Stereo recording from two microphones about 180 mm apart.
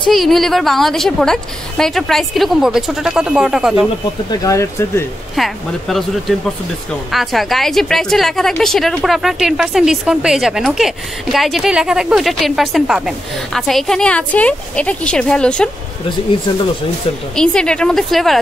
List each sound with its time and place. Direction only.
0.1 s a woman's voice: centre (ahead or behind)
4.3 s speech: 20° left (ahead or behind)
5.3 s a woman's voice: centre (ahead or behind)
17.4 s a woman's voice: 5° left (ahead or behind)